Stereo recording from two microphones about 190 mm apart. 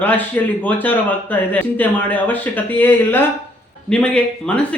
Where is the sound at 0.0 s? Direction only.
10° left (ahead or behind).